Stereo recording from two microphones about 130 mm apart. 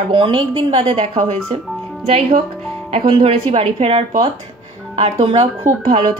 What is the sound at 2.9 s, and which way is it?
Speech, 45° right (ahead or behind).